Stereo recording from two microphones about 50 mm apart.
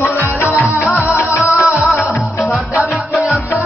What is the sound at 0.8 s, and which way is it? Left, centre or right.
Music, right.